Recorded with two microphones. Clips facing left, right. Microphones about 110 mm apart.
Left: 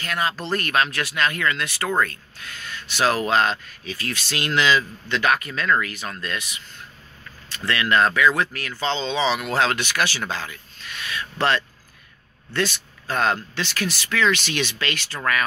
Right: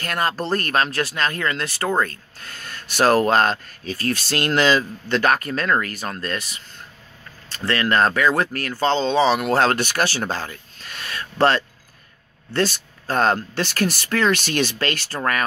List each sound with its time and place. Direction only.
0.0 s speech: 45° right (ahead or behind)